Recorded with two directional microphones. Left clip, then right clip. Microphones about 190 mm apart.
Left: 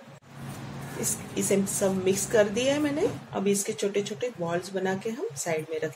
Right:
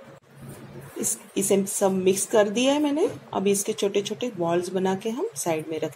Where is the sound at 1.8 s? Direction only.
25° right (ahead or behind).